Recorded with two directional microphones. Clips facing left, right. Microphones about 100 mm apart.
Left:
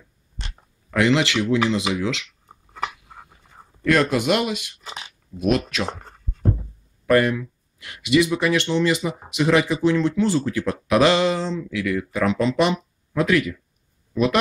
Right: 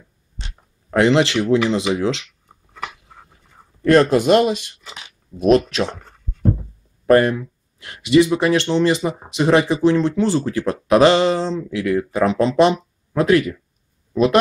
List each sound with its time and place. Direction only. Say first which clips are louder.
0.8 s speech: right 4 dB; 35° right (ahead or behind)
3.8 s speech: right 6 dB; 35° right (ahead or behind)
7.1 s speech: right 4 dB; 35° right (ahead or behind)